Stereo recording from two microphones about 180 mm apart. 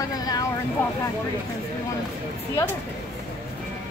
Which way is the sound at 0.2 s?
20° left (ahead or behind).